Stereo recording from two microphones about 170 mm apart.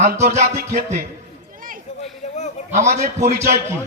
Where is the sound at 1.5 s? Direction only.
55° right (ahead or behind).